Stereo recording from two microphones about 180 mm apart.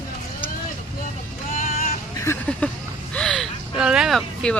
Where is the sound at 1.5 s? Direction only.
45° left (ahead or behind).